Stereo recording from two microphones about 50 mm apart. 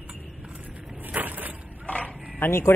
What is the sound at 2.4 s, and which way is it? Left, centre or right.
Speech, left.